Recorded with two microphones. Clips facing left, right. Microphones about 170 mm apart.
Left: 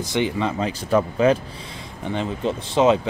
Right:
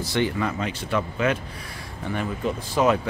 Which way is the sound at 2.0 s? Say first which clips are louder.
Left 2 dB; 20° left (ahead or behind).